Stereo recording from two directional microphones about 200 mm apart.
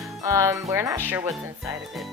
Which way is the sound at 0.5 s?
15° right (ahead or behind).